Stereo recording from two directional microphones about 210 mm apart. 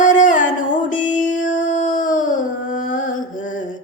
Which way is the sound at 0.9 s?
40° left (ahead or behind).